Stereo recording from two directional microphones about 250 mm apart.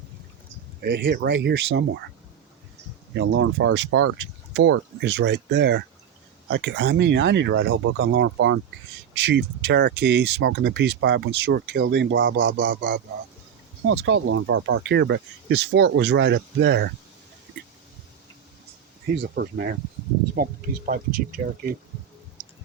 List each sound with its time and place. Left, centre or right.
0.8 s speech: right
3.2 s speech: right
12.4 s speech: right
13.8 s speech: right
19.0 s speech: right